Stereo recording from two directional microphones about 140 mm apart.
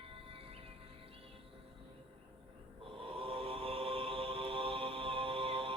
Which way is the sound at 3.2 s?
40° right (ahead or behind).